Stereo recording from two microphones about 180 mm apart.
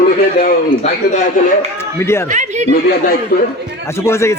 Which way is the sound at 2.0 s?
15° left (ahead or behind).